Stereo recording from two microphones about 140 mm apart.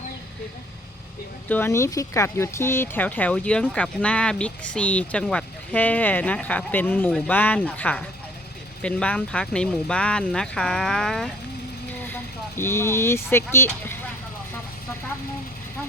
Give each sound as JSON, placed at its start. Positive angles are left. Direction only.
{"t": 1.5, "sound": "speech", "side_deg": 15}
{"t": 12.0, "sound": "speech", "side_deg": 15}